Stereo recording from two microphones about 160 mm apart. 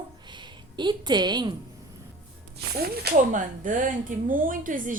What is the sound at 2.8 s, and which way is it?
Speech, 75° right (ahead or behind).